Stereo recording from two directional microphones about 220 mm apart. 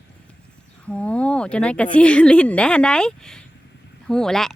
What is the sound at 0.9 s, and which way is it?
Speech, 5° left (ahead or behind).